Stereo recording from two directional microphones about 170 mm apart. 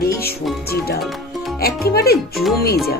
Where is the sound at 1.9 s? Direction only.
65° left (ahead or behind).